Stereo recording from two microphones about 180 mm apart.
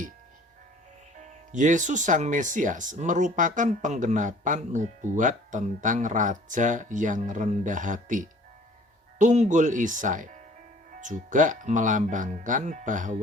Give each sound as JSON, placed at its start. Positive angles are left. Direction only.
{"t": 1.2, "sound": "speech", "side_deg": -45}